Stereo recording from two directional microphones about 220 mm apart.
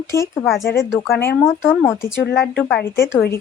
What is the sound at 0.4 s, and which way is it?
Speech, centre (ahead or behind).